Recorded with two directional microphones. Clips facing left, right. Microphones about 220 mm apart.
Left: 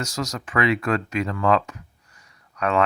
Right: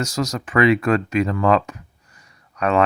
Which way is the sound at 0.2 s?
20° right (ahead or behind).